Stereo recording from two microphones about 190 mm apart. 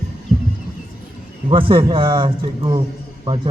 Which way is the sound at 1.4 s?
25° right (ahead or behind).